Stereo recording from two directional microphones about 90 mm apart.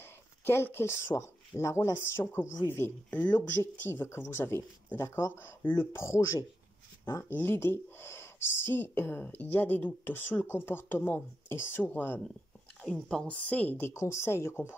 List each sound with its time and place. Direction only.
0.5 s speech: 25° left (ahead or behind)
12.8 s speech: 5° left (ahead or behind)
13.3 s speech: 15° left (ahead or behind)
13.9 s speech: 30° left (ahead or behind)